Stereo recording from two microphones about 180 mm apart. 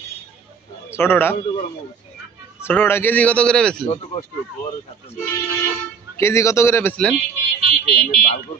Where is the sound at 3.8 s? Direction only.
35° left (ahead or behind).